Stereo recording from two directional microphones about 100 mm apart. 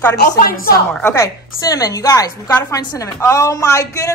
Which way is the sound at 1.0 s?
30° left (ahead or behind).